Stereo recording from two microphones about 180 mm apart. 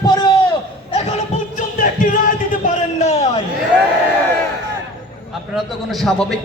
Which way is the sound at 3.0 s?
40° left (ahead or behind).